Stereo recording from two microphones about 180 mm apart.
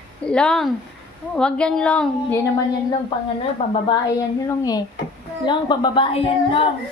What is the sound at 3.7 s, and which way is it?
Speech, 20° left (ahead or behind).